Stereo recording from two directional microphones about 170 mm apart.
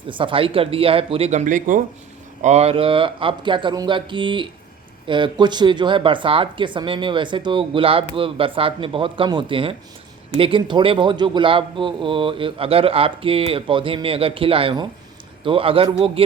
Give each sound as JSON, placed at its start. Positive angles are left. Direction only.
{"t": 0.1, "sound": "a man's voice", "side_deg": -30}